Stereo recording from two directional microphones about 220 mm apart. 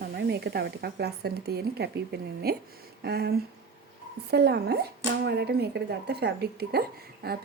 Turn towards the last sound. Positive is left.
turn(degrees=-45)  # may be behind; listen again after turning